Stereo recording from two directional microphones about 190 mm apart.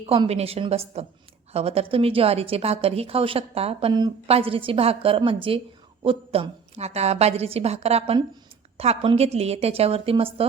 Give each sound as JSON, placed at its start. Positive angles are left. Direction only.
{"t": 0.0, "sound": "a woman's voice", "side_deg": -30}